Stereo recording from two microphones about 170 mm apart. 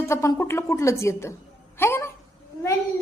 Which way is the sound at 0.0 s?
15° left (ahead or behind).